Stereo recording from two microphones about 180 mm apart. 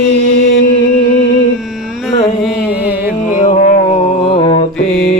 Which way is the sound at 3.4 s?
35° left (ahead or behind).